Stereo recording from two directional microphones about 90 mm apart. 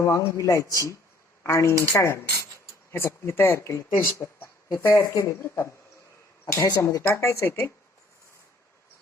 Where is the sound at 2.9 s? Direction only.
25° left (ahead or behind).